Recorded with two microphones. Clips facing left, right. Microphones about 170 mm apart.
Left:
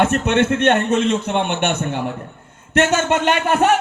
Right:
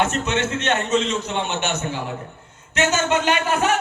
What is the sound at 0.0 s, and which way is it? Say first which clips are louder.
Speech: left 5 dB; 55° left (ahead or behind).